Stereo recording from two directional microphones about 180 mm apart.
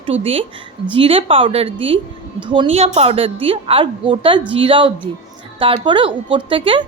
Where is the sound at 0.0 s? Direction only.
30° right (ahead or behind).